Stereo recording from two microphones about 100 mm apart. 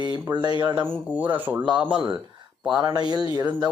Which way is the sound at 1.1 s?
15° right (ahead or behind).